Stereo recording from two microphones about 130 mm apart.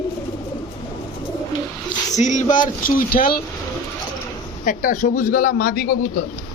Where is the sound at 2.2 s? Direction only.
70° left (ahead or behind).